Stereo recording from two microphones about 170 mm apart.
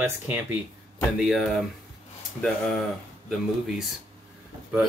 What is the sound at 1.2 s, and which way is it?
Speech, centre (ahead or behind).